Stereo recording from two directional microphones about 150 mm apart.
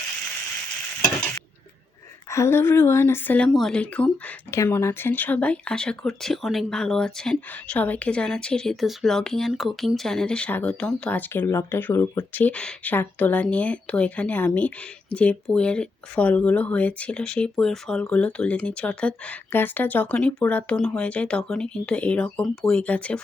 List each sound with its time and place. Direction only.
2.3 s speech: 15° left (ahead or behind)